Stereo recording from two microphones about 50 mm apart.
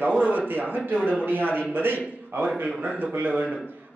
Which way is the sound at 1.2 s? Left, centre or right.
Right.